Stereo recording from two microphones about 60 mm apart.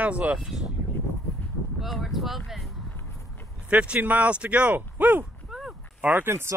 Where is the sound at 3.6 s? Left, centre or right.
Centre.